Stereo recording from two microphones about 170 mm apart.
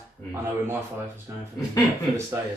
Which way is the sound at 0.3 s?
15° right (ahead or behind).